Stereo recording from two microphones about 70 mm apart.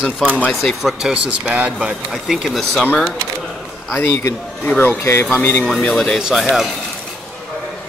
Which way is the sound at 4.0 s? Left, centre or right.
Left.